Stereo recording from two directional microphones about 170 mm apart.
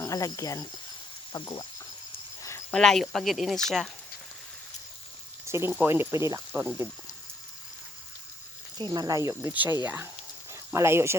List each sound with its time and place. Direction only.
0.0 s speech: 20° left (ahead or behind)
2.7 s speech: centre (ahead or behind)
5.5 s speech: 15° right (ahead or behind)
8.8 s speech: 25° right (ahead or behind)